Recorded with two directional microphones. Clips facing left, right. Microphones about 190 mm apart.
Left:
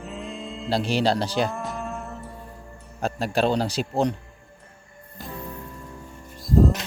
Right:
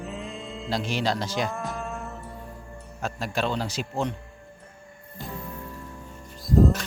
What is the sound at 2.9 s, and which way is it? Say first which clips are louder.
Speech: left 5 dB; 35° left (ahead or behind).